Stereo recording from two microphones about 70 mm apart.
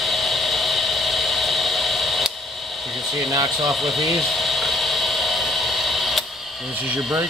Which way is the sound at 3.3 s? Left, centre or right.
Right.